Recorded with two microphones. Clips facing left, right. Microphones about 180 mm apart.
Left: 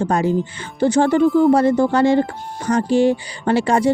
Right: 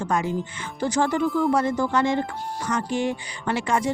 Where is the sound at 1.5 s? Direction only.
30° left (ahead or behind).